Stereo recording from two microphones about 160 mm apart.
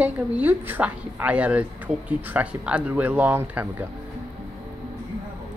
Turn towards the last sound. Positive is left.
turn(degrees=-10)  # may be behind; listen again after turning